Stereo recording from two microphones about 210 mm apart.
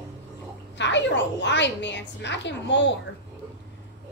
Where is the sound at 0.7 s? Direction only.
55° left (ahead or behind).